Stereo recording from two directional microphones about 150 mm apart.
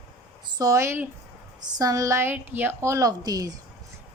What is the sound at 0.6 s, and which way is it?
Speech, 20° right (ahead or behind).